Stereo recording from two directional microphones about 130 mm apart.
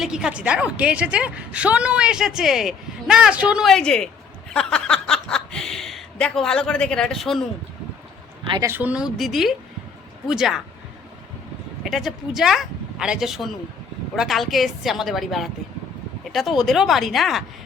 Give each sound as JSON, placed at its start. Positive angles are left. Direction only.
{"t": 0.0, "sound": "a woman's voice", "side_deg": -5}
{"t": 8.6, "sound": "a woman's voice", "side_deg": -15}
{"t": 11.8, "sound": "a woman's voice", "side_deg": 0}